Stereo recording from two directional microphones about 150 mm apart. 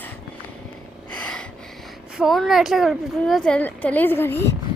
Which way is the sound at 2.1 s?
Centre (ahead or behind).